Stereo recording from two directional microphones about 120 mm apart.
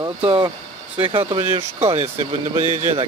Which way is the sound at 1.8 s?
65° right (ahead or behind).